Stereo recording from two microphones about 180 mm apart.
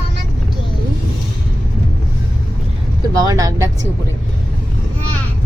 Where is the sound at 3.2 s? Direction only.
20° right (ahead or behind).